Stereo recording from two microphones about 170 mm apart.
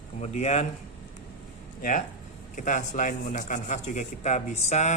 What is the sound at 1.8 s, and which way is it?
A man's voice, 50° left (ahead or behind).